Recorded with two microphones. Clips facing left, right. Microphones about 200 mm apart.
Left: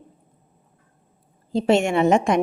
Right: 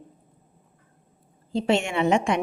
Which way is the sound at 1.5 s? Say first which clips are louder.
Left 5 dB; 45° left (ahead or behind).